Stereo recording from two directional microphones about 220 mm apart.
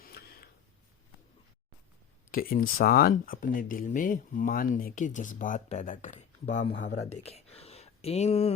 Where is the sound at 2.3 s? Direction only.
40° left (ahead or behind).